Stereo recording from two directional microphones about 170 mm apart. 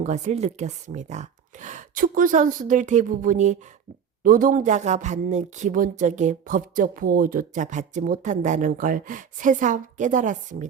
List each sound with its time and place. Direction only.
0.0 s speech: 40° right (ahead or behind)